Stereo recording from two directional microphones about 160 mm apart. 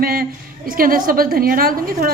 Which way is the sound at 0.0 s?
65° right (ahead or behind).